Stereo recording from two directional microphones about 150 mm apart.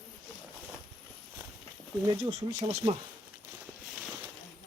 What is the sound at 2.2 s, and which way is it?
Speech, 35° right (ahead or behind).